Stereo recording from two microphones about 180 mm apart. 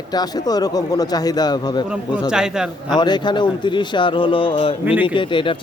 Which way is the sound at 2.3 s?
5° right (ahead or behind).